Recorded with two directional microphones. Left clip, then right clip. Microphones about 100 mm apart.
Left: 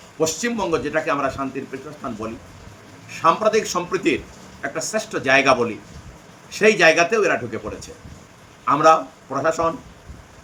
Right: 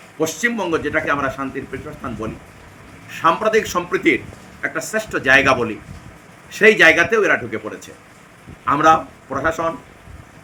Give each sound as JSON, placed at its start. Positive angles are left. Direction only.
{"t": 0.2, "sound": "a man's voice", "side_deg": 15}
{"t": 3.2, "sound": "a man's voice", "side_deg": 10}